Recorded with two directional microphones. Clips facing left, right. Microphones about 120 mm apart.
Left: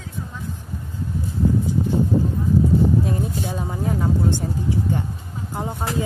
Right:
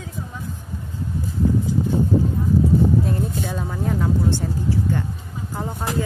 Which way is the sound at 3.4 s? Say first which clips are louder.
Even; 20° left (ahead or behind).